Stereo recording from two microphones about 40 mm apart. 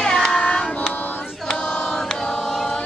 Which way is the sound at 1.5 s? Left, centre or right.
Centre.